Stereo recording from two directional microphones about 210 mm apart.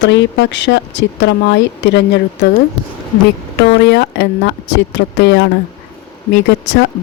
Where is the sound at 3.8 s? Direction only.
55° left (ahead or behind).